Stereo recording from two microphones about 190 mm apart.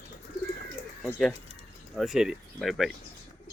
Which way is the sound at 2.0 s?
Centre (ahead or behind).